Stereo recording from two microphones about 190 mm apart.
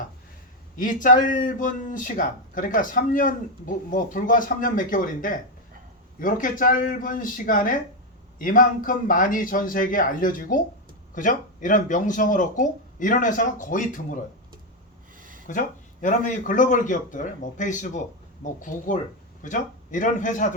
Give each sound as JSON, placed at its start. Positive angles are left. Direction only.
{"t": 0.8, "sound": "speech", "side_deg": 45}
{"t": 15.2, "sound": "a sound", "side_deg": -45}
{"t": 15.4, "sound": "a man's voice", "side_deg": 40}